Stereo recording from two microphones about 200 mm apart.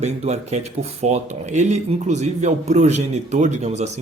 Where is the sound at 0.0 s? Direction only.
35° right (ahead or behind).